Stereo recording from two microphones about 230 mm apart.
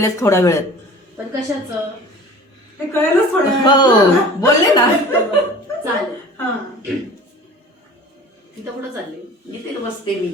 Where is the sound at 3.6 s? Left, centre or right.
Centre.